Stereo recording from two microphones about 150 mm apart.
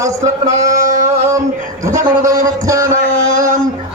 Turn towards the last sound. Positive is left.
turn(degrees=-20)  # may be behind; listen again after turning